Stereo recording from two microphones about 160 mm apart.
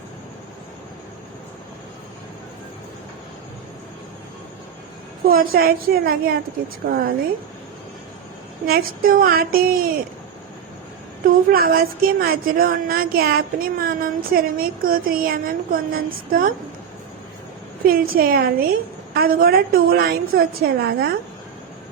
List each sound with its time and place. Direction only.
5.3 s a woman's voice: 65° right (ahead or behind)
8.6 s a woman's voice: 70° right (ahead or behind)
11.3 s a woman's voice: 65° right (ahead or behind)
17.8 s a woman's voice: 65° right (ahead or behind)